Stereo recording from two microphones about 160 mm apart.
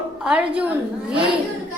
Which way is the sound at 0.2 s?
5° right (ahead or behind).